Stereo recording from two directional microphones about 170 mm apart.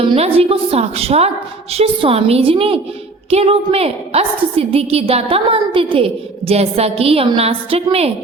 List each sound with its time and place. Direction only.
0.0 s a woman's voice: 30° right (ahead or behind)